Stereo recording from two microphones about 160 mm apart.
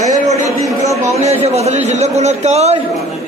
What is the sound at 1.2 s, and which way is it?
A man's voice, 40° right (ahead or behind).